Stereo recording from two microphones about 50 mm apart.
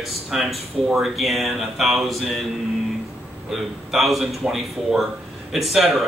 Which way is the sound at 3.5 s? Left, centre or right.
Centre.